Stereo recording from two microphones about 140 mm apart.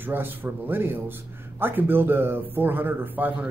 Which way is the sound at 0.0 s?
15° right (ahead or behind).